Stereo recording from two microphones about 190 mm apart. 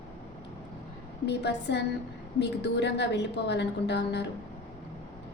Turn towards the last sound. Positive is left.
turn(degrees=65)  # may be behind; listen again after turning